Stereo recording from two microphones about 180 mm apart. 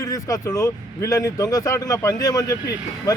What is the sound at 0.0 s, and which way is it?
Speech, 20° left (ahead or behind).